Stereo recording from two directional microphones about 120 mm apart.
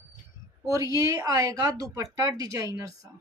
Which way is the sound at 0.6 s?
30° right (ahead or behind).